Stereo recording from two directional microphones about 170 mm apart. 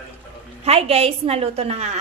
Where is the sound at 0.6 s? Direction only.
35° right (ahead or behind).